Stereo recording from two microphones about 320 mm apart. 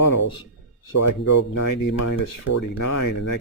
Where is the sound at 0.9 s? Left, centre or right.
Left.